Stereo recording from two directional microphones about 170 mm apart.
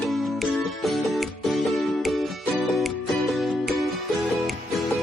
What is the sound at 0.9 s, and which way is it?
Music, centre (ahead or behind).